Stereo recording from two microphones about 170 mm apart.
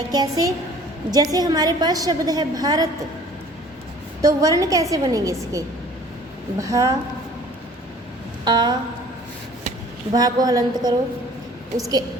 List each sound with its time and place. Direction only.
0.1 s a woman's voice: 20° right (ahead or behind)
4.2 s a woman's voice: 20° right (ahead or behind)
8.4 s a woman's voice: 25° right (ahead or behind)
10.2 s a woman's voice: 20° right (ahead or behind)